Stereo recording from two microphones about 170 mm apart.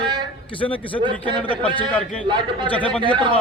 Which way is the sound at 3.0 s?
30° right (ahead or behind).